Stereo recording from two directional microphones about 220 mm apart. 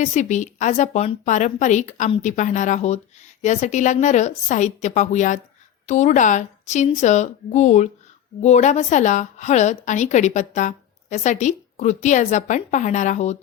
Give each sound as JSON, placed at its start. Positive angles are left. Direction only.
{"t": 0.0, "sound": "a woman's voice", "side_deg": 35}